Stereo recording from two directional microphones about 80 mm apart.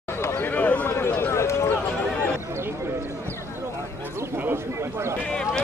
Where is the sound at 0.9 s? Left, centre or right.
Left.